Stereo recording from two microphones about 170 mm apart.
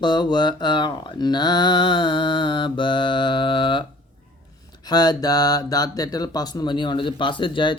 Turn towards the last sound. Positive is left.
turn(degrees=30)  # may be behind; listen again after turning